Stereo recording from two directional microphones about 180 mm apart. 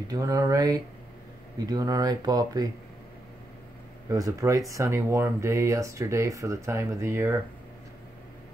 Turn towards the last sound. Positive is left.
turn(degrees=-15)  # may be behind; listen again after turning